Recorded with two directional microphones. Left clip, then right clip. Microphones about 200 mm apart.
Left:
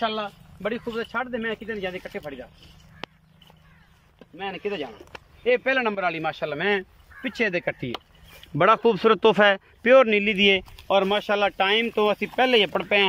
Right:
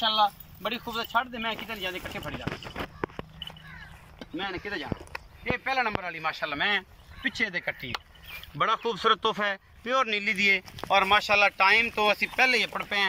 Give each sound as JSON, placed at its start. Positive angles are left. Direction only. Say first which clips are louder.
{"t": 0.0, "sound": "speech", "louder": "right 3 dB", "side_deg": 45}
{"t": 4.2, "sound": "a man's voice", "louder": "left 3 dB", "side_deg": 55}